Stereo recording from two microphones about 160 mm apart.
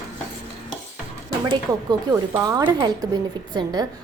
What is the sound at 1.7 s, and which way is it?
Speech, 25° right (ahead or behind).